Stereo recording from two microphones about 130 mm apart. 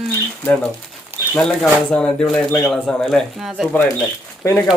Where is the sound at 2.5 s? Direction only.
25° left (ahead or behind).